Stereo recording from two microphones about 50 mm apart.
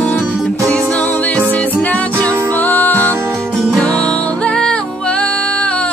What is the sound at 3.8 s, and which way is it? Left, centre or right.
Music, centre.